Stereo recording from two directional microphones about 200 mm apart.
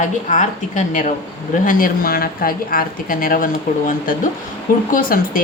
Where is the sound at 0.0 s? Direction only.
40° left (ahead or behind).